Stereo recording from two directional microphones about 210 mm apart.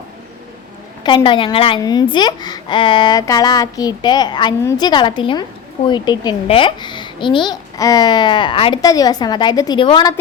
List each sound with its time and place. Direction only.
1.0 s a woman's voice: 25° left (ahead or behind)